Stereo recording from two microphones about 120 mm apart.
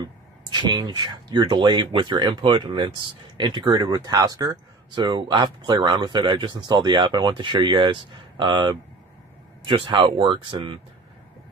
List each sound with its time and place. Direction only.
0.5 s speech: 40° right (ahead or behind)